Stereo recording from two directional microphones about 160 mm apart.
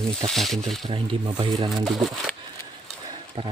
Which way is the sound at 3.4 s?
35° right (ahead or behind).